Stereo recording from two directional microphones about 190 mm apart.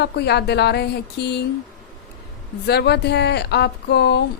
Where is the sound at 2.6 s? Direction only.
60° left (ahead or behind).